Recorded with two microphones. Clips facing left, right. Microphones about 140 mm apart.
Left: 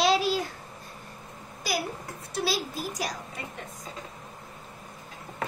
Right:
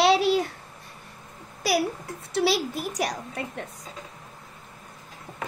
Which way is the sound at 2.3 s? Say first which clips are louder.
Right 6 dB; 70° right (ahead or behind).